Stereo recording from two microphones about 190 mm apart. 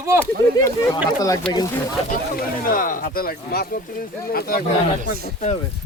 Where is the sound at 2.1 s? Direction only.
45° left (ahead or behind).